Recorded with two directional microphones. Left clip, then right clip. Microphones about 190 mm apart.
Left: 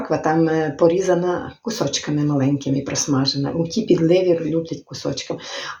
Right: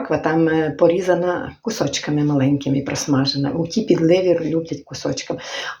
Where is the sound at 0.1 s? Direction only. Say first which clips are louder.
Right 1 dB; 20° right (ahead or behind).